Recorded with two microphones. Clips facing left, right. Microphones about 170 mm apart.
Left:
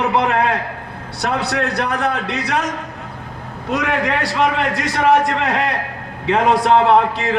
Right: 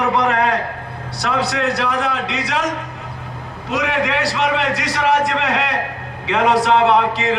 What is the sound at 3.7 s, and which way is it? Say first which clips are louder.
A man's voice: even; 55° left (ahead or behind).